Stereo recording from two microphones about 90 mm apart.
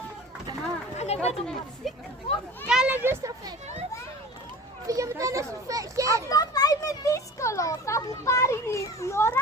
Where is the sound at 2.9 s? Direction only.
25° right (ahead or behind).